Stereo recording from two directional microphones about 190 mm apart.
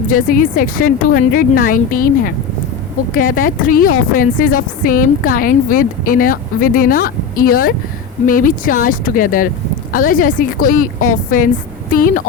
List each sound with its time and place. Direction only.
0.1 s a woman's voice: 45° left (ahead or behind)